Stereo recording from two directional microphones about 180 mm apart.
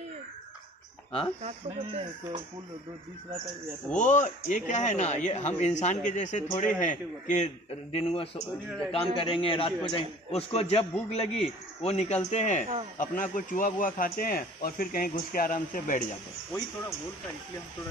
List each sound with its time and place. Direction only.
1.4 s speech: 30° right (ahead or behind)
4.0 s a man's voice: 40° left (ahead or behind)
7.9 s a man's voice: 35° left (ahead or behind)